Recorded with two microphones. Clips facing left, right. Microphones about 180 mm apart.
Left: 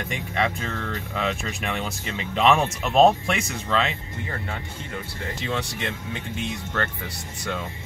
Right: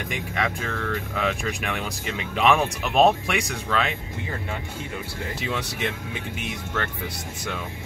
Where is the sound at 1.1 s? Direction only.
Centre (ahead or behind).